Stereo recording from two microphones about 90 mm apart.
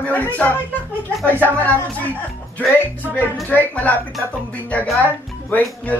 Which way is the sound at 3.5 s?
15° left (ahead or behind).